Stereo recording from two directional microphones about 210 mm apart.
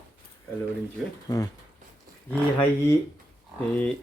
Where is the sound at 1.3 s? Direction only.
15° left (ahead or behind).